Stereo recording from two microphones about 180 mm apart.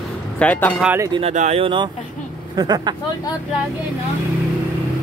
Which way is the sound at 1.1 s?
35° right (ahead or behind).